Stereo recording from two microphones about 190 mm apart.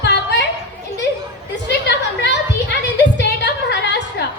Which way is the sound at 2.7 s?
65° left (ahead or behind).